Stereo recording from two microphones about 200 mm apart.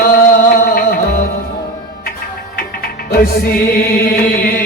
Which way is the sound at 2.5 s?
50° left (ahead or behind).